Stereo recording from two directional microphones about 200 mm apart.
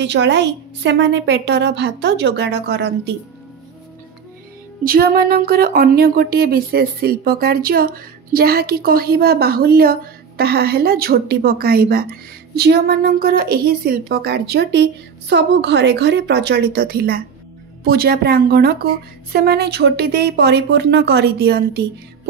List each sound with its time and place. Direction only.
0.0 s speech: 60° right (ahead or behind)
4.8 s speech: 50° right (ahead or behind)